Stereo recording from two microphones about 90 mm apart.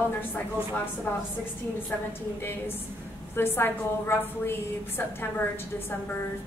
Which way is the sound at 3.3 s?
25° left (ahead or behind).